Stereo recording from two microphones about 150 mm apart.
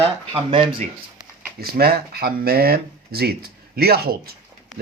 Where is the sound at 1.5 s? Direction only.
90° right.